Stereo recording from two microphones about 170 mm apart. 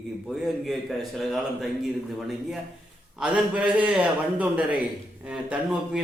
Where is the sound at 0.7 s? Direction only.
Centre (ahead or behind).